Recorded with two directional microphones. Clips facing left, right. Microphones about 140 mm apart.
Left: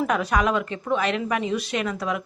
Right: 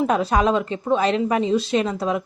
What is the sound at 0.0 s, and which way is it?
A woman's voice, 30° right (ahead or behind).